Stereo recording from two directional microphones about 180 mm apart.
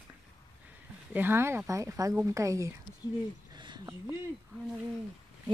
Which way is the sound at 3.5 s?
25° right (ahead or behind).